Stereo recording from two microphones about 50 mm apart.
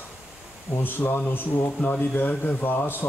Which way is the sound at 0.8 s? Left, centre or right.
Left.